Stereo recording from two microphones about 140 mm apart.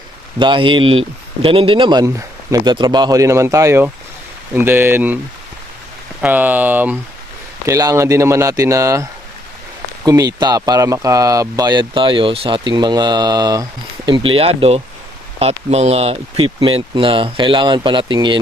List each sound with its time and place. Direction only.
0.3 s speech: 35° right (ahead or behind); by 5.1 s 15° right (ahead or behind)
6.2 s speech: 10° right (ahead or behind)
7.7 s speech: 20° right (ahead or behind)